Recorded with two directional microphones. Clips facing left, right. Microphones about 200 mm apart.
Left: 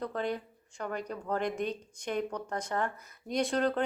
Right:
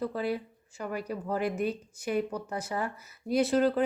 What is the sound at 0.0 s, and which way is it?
Speech, 5° right (ahead or behind).